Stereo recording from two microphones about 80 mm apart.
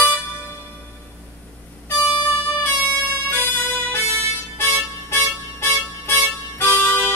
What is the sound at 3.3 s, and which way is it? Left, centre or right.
Music, left.